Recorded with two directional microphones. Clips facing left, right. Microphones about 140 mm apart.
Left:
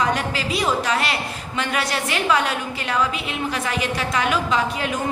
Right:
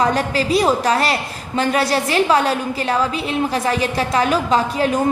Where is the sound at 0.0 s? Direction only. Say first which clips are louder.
Right 5 dB; 35° right (ahead or behind).